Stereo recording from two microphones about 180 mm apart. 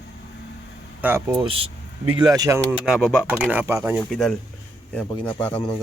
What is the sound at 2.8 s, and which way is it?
A man's voice, 5° right (ahead or behind).